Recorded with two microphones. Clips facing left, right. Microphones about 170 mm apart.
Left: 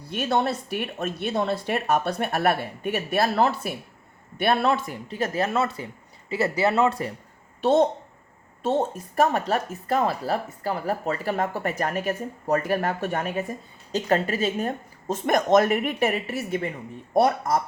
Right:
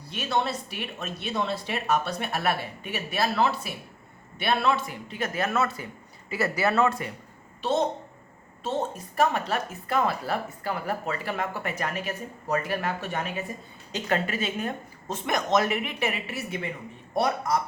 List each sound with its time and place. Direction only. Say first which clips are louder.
0.0 s speech: left 4 dB; 55° left (ahead or behind); by 7.1 s 30° left (ahead or behind)
7.6 s a woman's voice: left 6 dB; 55° left (ahead or behind)